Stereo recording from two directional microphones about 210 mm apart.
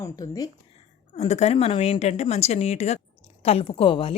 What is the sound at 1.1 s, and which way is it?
A woman's voice, 30° left (ahead or behind).